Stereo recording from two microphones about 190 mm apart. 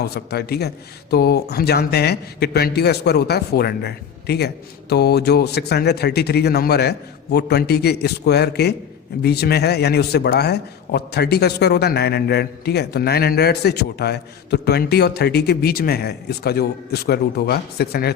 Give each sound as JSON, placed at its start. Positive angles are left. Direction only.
{"t": 0.0, "sound": "a man's voice", "side_deg": 55}